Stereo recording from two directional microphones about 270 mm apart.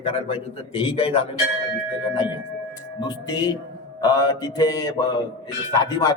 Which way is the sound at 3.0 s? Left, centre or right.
Centre.